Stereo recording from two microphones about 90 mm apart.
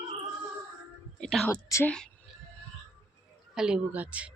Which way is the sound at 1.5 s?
25° left (ahead or behind).